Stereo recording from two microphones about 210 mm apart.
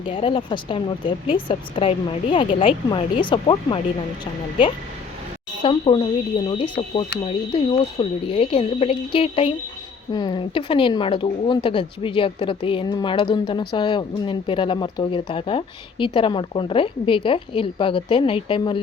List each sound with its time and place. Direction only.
0.0 s speech: 25° left (ahead or behind)
5.6 s speech: 25° left (ahead or behind)